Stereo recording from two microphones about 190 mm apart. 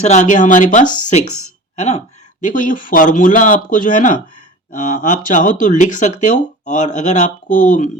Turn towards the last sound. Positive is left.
turn(degrees=40)  # may be behind; listen again after turning